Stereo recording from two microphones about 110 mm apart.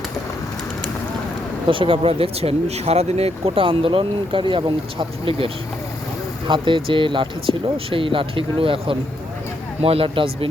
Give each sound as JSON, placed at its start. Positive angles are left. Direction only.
{"t": 1.6, "sound": "speech", "side_deg": -50}
{"t": 6.5, "sound": "speech", "side_deg": -50}